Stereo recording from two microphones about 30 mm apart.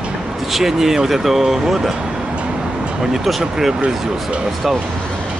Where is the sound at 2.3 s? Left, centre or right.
Right.